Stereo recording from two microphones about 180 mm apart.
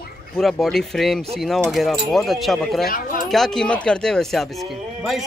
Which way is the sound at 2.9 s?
50° left (ahead or behind).